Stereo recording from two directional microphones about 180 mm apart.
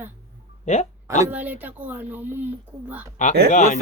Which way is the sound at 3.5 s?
45° left (ahead or behind).